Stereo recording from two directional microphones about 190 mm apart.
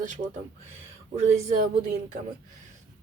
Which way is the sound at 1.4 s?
40° right (ahead or behind).